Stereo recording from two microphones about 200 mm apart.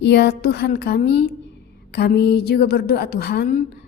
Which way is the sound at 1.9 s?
55° left (ahead or behind).